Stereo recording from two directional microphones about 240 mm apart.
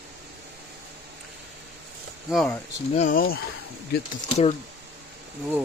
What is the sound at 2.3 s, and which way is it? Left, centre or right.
Speech, centre.